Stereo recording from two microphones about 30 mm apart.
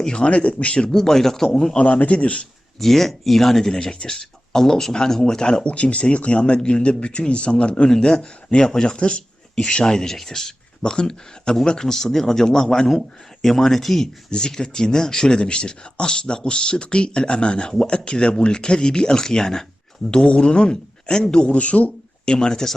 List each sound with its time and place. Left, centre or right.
0.0 s speech: left
0.3 s speech: left
0.9 s speech: centre
2.0 s a man's voice: left
2.7 s speech: centre
3.7 s speech: left
5.6 s speech: left
7.9 s speech: left
8.2 s speech: left; by 12.8 s centre
12.9 s speech: centre
14.3 s speech: left
22.3 s speech: left